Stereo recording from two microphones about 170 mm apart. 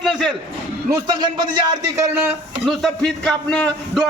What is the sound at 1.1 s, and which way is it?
Speech, 25° right (ahead or behind).